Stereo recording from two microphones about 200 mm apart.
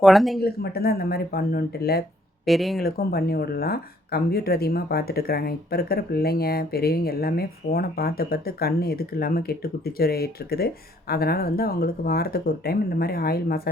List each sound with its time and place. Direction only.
0.0 s speech: centre (ahead or behind)
0.3 s speech: 50° left (ahead or behind)
2.5 s speech: centre (ahead or behind)
2.8 s speech: 50° left (ahead or behind)